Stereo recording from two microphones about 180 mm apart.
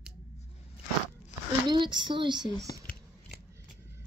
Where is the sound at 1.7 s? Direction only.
25° right (ahead or behind).